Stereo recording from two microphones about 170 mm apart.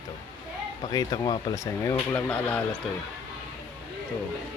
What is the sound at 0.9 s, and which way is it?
Speech, 25° left (ahead or behind).